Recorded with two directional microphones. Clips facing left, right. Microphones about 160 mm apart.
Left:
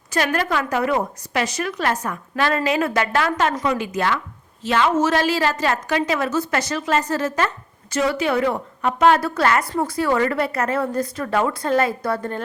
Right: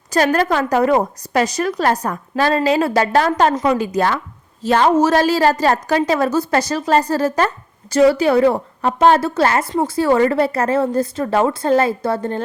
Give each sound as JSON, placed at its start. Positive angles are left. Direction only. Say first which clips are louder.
{"t": 0.1, "sound": "a woman's voice", "louder": "right 5 dB", "side_deg": -35}